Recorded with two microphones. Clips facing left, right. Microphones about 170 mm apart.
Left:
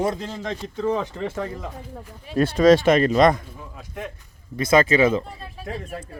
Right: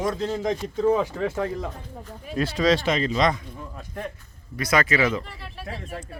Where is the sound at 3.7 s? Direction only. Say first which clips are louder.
Even; 5° left (ahead or behind).